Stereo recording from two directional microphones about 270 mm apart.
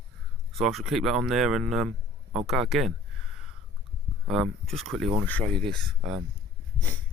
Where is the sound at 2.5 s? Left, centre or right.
Centre.